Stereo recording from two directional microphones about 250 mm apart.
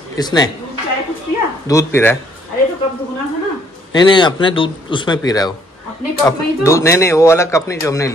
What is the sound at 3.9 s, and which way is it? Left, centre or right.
Speech, centre.